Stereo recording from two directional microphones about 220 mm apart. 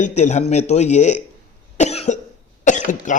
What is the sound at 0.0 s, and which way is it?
Speech, 30° left (ahead or behind).